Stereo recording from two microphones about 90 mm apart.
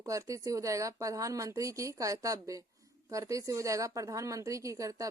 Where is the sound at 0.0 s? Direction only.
35° right (ahead or behind).